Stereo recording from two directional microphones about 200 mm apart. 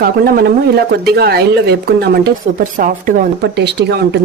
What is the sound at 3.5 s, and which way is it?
Speech, 55° right (ahead or behind).